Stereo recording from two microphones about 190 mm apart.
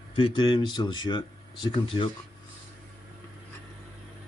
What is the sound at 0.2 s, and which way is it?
Speech, 25° left (ahead or behind).